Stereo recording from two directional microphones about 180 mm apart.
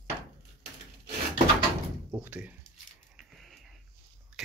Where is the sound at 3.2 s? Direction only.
Centre (ahead or behind).